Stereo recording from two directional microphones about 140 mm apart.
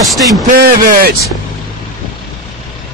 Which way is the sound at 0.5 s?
90° right.